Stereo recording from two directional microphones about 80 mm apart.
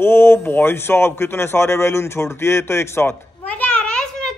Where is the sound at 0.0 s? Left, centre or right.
Left.